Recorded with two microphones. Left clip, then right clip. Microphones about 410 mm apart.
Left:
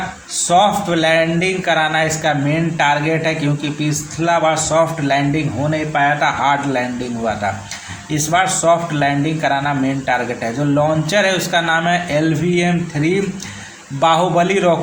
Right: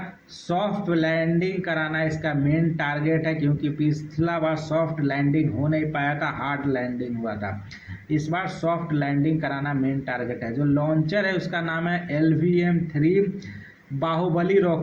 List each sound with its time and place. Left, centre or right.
0.4 s speech: right
8.1 s speech: right